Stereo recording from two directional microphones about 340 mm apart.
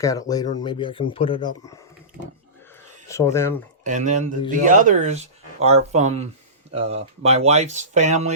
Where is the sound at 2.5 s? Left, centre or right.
Centre.